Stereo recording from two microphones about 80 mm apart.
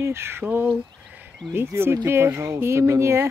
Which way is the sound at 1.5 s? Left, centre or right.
Right.